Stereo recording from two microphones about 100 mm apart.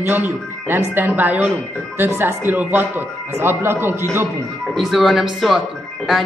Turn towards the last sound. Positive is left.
turn(degrees=0)  # may be behind; listen again after turning